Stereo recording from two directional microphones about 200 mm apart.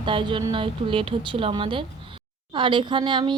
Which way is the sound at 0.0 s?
25° right (ahead or behind).